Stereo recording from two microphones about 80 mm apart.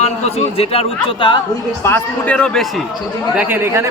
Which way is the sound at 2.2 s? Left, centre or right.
Centre.